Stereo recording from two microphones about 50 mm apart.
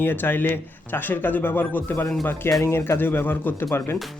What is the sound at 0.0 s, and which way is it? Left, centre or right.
Speech, left.